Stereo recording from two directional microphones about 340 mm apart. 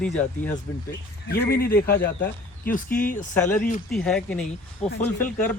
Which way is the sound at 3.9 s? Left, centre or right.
Centre.